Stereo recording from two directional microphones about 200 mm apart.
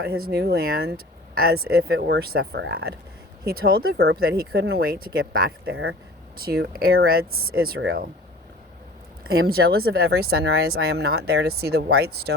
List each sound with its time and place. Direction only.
0.0 s speech: 50° right (ahead or behind)
5.7 s speech: 85° right
6.3 s speech: 50° right (ahead or behind)
9.5 s speech: 50° right (ahead or behind)